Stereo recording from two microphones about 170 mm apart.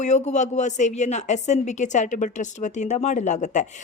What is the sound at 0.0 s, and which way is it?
A woman's voice, 45° left (ahead or behind).